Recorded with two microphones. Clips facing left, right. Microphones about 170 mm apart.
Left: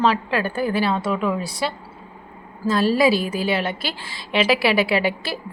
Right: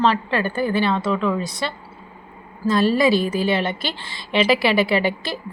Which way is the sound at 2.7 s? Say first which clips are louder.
Right 1 dB; 5° left (ahead or behind).